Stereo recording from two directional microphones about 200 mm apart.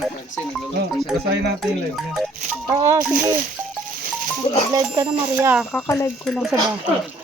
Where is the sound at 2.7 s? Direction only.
20° right (ahead or behind).